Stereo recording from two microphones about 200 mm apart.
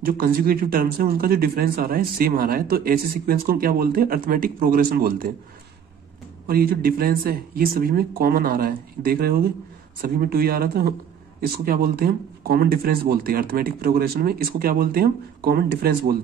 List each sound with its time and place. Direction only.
0.0 s speech: 45° right (ahead or behind)
6.4 s speech: 50° right (ahead or behind)